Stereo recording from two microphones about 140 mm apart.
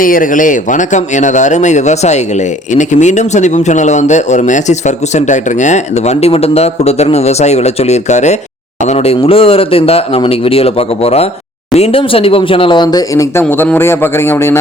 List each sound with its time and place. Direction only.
0.0 s speech: 80° left; by 13.4 s 25° left (ahead or behind)
13.4 s a man's voice: 15° left (ahead or behind)